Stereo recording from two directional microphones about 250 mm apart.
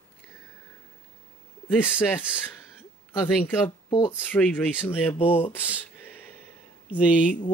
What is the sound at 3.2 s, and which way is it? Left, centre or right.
Speech, centre.